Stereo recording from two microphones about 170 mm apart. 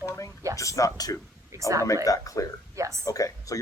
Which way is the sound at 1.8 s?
20° left (ahead or behind).